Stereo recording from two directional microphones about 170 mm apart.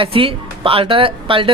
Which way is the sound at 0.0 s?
35° right (ahead or behind).